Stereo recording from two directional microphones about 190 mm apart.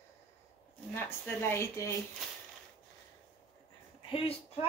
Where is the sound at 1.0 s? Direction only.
10° left (ahead or behind).